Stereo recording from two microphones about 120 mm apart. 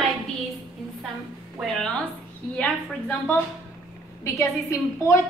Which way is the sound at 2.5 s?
15° left (ahead or behind).